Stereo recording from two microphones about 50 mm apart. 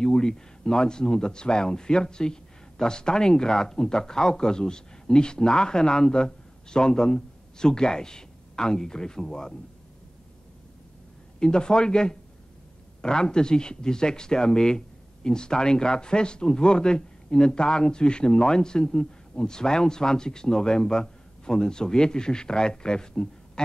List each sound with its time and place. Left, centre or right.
0.0 s speech: centre
11.3 s speech: centre